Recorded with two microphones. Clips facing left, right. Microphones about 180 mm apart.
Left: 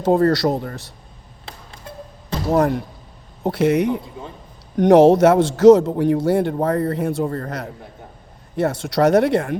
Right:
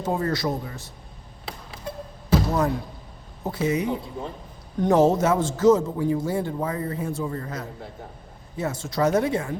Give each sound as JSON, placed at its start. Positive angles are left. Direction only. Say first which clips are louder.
{"t": 0.0, "sound": "a man's voice", "louder": "left 9 dB", "side_deg": 70}
{"t": 2.5, "sound": "speech", "louder": "left 6 dB", "side_deg": 60}
{"t": 3.4, "sound": "a man's voice", "louder": "left 7 dB", "side_deg": 75}